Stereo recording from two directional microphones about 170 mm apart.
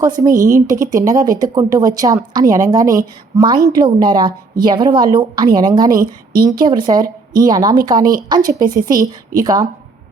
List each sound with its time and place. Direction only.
0.0 s a woman's voice: 20° right (ahead or behind)